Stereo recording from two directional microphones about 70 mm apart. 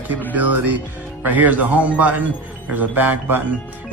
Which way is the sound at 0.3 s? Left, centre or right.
Right.